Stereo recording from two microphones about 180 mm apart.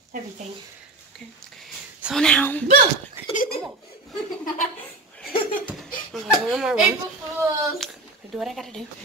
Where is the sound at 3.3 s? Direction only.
50° left (ahead or behind).